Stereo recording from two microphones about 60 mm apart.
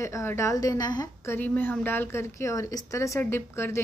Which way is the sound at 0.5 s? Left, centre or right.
Left.